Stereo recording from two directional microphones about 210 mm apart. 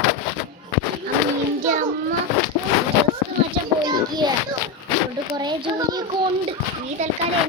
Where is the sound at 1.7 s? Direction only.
40° right (ahead or behind).